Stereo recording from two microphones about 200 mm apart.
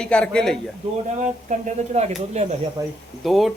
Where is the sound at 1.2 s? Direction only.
35° right (ahead or behind).